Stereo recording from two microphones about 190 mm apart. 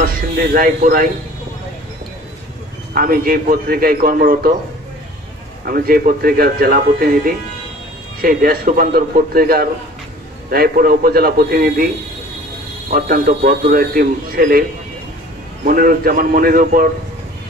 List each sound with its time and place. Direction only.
0.0 s speech: 50° right (ahead or behind)
2.9 s a man's voice: 50° right (ahead or behind)
5.7 s a man's voice: 50° right (ahead or behind)
12.9 s a man's voice: 50° right (ahead or behind)
15.6 s a man's voice: 50° right (ahead or behind)